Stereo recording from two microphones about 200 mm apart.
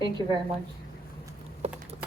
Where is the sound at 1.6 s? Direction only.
30° right (ahead or behind).